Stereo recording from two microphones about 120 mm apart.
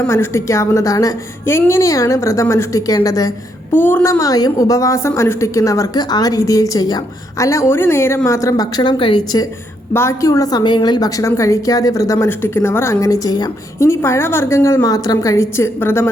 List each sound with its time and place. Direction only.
0.0 s a woman's voice: 25° left (ahead or behind)
3.7 s a woman's voice: 15° left (ahead or behind); by 9.5 s 35° left (ahead or behind)
9.9 s a woman's voice: 20° left (ahead or behind)